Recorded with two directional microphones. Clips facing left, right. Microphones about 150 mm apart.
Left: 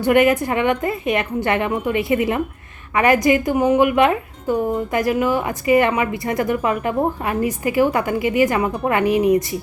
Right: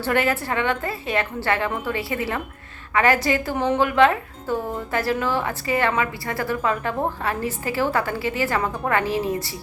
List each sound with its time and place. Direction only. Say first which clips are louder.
0.0 s speech: left 7 dB; 15° left (ahead or behind)